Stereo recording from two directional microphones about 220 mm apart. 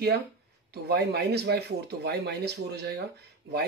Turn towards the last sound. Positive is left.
turn(degrees=-45)  # may be behind; listen again after turning